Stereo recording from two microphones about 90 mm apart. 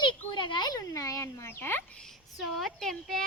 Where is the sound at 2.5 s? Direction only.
5° left (ahead or behind).